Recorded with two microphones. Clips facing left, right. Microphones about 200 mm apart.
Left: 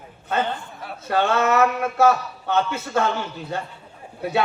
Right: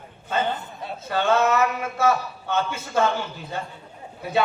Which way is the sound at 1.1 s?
60° left (ahead or behind).